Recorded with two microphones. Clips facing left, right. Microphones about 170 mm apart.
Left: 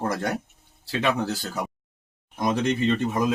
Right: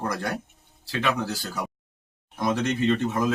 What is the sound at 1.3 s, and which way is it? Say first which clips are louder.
Speech: left 2 dB; 20° left (ahead or behind).